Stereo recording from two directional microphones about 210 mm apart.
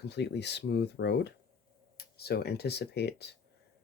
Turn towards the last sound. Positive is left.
turn(degrees=55)  # may be behind; listen again after turning